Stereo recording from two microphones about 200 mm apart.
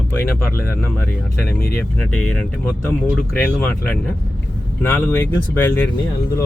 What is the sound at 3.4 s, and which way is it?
Speech, 10° left (ahead or behind).